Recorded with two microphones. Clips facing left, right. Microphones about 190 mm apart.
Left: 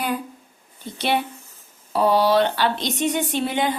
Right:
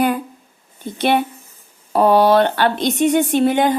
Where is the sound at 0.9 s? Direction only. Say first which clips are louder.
Right 6 dB; 55° right (ahead or behind).